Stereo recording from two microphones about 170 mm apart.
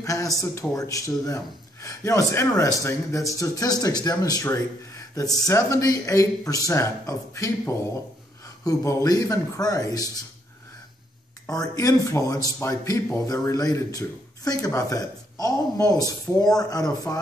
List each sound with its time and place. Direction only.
0.0 s speech: 20° left (ahead or behind)
11.4 s speech: 20° left (ahead or behind)